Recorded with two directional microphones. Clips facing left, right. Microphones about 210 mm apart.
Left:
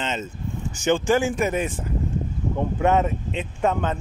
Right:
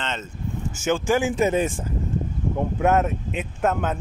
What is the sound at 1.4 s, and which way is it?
Speech, 25° right (ahead or behind).